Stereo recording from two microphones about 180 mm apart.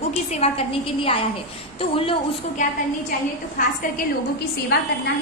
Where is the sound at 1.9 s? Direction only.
30° left (ahead or behind).